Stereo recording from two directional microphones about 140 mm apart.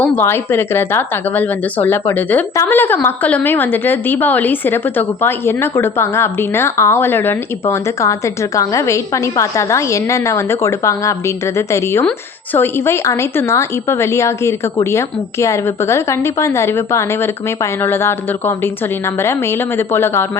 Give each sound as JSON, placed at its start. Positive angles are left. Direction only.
{"t": 0.2, "sound": "a woman's voice", "side_deg": 15}